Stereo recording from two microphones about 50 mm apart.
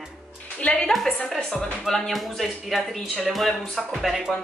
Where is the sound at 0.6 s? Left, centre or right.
Left.